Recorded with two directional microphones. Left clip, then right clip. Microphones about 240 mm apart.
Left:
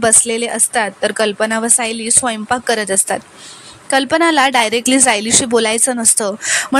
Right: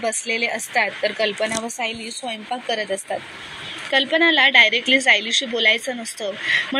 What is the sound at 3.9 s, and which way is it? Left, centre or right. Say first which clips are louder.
A woman's voice: left 4 dB; left.